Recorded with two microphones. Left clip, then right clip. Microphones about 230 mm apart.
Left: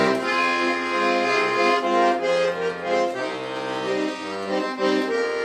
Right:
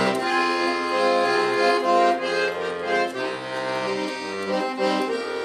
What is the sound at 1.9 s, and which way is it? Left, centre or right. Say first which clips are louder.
Accordion: even; right.